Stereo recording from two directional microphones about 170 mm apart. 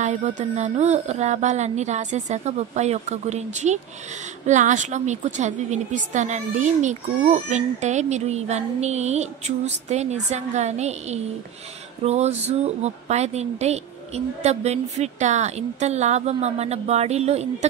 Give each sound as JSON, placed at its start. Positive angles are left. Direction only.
{"t": 0.0, "sound": "music", "side_deg": -45}
{"t": 0.4, "sound": "a woman's voice", "side_deg": -45}